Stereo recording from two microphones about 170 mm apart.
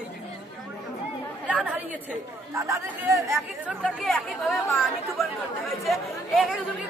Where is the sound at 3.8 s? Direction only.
5° left (ahead or behind).